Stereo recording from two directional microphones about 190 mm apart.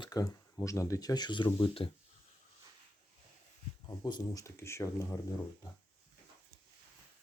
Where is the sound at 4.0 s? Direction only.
20° left (ahead or behind).